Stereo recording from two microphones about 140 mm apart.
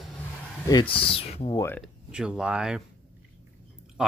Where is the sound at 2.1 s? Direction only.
5° right (ahead or behind).